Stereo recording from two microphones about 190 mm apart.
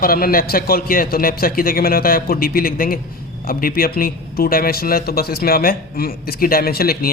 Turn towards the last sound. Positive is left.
turn(degrees=55)  # may be behind; listen again after turning